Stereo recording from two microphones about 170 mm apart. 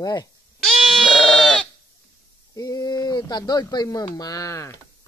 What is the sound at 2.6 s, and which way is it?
Speech, 20° left (ahead or behind).